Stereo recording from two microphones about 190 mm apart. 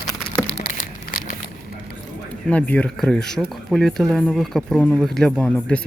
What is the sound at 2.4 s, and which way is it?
Speech, 5° left (ahead or behind).